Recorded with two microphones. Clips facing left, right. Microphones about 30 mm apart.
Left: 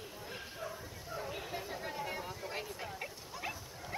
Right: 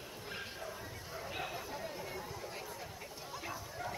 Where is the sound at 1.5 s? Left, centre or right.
Left.